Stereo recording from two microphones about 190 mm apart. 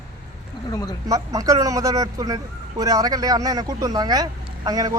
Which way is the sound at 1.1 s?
20° right (ahead or behind).